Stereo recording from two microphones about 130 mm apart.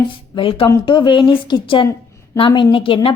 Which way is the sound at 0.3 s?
45° left (ahead or behind).